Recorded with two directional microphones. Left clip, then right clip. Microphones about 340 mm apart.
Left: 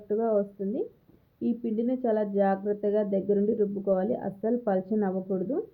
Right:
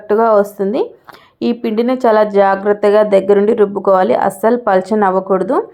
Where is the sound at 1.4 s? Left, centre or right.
Centre.